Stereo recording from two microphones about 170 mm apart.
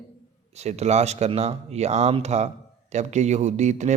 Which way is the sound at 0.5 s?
40° right (ahead or behind).